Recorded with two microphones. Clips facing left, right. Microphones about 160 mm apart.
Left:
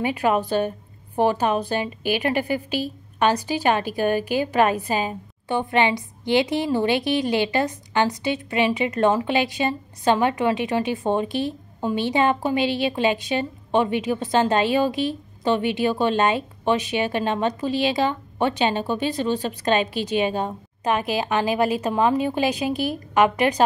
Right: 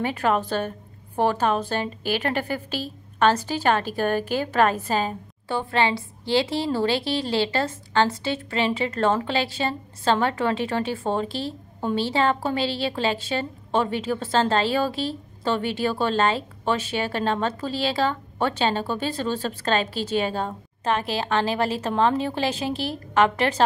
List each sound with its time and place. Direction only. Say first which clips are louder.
0.0 s a woman's voice: left 2 dB; 10° left (ahead or behind)